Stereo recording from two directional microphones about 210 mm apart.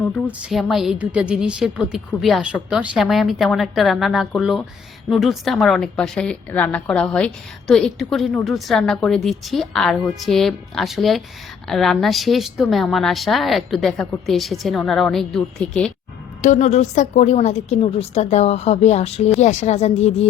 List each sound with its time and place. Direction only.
0.3 s a woman's voice: centre (ahead or behind)
16.4 s a woman's voice: 35° left (ahead or behind)